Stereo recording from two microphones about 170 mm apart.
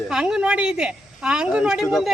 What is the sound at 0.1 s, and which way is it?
A woman's voice, 5° right (ahead or behind).